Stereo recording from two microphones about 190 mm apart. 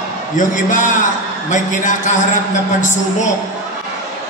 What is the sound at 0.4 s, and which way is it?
A man's voice, 45° left (ahead or behind).